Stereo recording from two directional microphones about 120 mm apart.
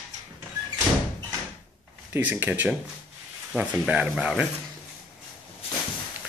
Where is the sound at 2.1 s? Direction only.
15° right (ahead or behind).